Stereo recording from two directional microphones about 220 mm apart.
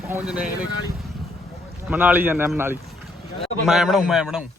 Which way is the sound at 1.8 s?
10° right (ahead or behind).